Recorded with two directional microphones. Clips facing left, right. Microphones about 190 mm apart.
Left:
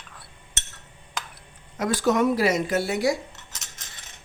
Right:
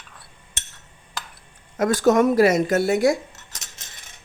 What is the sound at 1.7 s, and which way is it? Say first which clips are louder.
Speech: right 5 dB; 45° right (ahead or behind).